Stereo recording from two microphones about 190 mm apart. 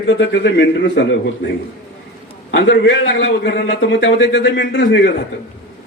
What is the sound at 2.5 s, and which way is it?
A man's voice, 75° left (ahead or behind).